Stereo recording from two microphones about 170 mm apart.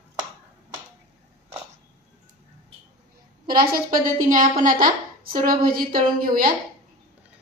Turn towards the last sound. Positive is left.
turn(degrees=-55)  # may be behind; listen again after turning